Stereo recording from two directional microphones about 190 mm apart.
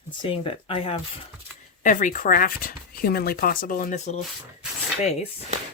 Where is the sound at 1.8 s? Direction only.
45° left (ahead or behind).